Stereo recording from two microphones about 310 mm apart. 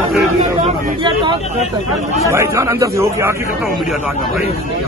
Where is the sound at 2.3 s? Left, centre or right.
Centre.